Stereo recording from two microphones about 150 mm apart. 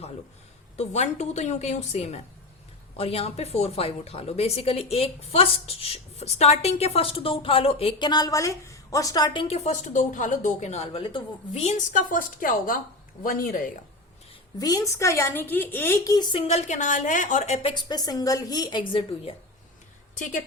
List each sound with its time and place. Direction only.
0.8 s a woman's voice: 50° left (ahead or behind); by 13.6 s 70° left (ahead or behind)
14.6 s a woman's voice: 25° left (ahead or behind)
16.1 s a woman's voice: 30° left (ahead or behind)
16.5 s speech: 50° left (ahead or behind); by 19.3 s 35° left (ahead or behind)
20.1 s a woman's voice: 55° left (ahead or behind)